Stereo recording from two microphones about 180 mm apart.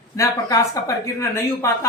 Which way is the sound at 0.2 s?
20° left (ahead or behind).